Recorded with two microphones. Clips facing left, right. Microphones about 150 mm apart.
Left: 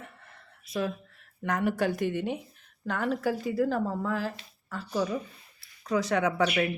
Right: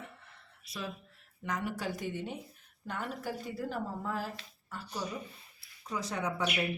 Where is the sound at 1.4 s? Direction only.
65° left (ahead or behind).